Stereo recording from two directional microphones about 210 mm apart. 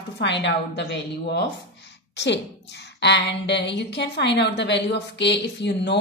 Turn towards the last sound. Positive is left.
turn(degrees=55)  # may be behind; listen again after turning